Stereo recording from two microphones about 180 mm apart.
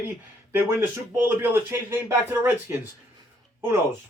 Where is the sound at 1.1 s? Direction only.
10° right (ahead or behind).